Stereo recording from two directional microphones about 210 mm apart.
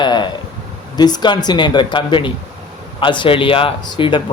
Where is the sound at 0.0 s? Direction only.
20° left (ahead or behind).